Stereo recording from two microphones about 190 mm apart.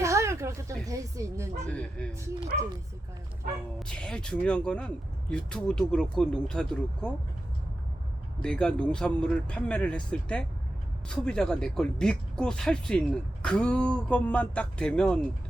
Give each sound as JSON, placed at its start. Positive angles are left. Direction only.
{"t": 0.0, "sound": "a sound", "side_deg": -15}
{"t": 1.7, "sound": "a woman's voice", "side_deg": 5}
{"t": 3.8, "sound": "speech", "side_deg": 5}
{"t": 8.4, "sound": "speech", "side_deg": 5}